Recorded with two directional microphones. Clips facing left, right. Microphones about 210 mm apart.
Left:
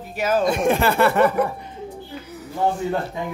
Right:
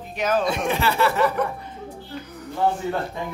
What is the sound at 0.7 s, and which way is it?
Speech, 50° left (ahead or behind).